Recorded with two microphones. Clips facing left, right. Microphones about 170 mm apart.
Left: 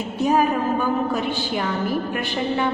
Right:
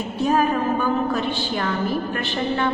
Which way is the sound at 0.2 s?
15° left (ahead or behind).